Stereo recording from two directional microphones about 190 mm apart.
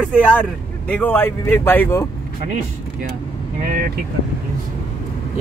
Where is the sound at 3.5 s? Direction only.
45° right (ahead or behind).